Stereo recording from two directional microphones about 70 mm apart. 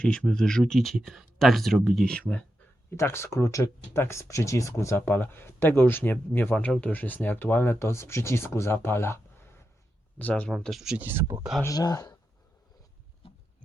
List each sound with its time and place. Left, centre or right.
0.0 s speech: centre
2.1 s speech: centre
2.9 s speech: left
4.9 s speech: left
10.2 s speech: left
10.5 s speech: centre
10.9 s speech: right
11.7 s speech: left